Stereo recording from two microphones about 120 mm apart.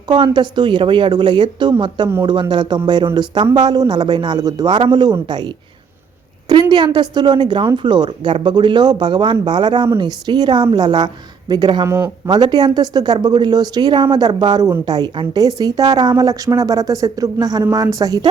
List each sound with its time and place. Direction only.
0.1 s speech: 40° right (ahead or behind)
6.5 s speech: 35° right (ahead or behind)
11.9 s speech: 20° right (ahead or behind)
12.3 s speech: 35° right (ahead or behind)